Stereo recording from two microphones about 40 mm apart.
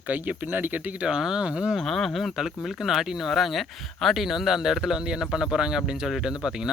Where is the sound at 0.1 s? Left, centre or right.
Right.